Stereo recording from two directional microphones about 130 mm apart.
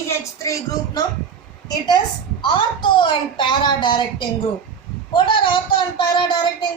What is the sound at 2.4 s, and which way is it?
A woman's voice, 35° left (ahead or behind).